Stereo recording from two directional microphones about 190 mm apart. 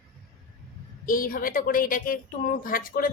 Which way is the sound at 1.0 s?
45° left (ahead or behind).